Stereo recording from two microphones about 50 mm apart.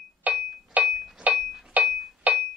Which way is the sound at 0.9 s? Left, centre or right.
Centre.